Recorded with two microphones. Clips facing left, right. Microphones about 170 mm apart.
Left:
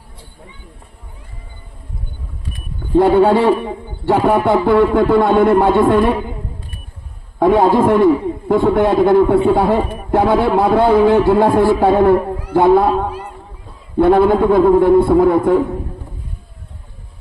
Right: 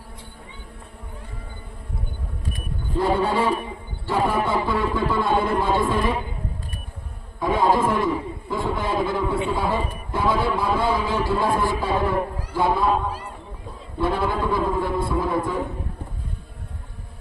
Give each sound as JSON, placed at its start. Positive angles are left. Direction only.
{"t": 2.9, "sound": "a man's voice", "side_deg": 65}
{"t": 7.3, "sound": "a man's voice", "side_deg": 65}